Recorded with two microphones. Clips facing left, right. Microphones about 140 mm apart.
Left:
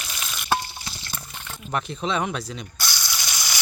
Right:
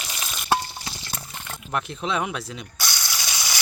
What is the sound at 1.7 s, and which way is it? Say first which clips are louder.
Ratchet: left 1 dB; centre (ahead or behind).